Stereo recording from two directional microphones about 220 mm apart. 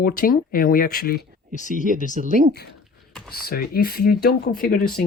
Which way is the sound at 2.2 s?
40° right (ahead or behind).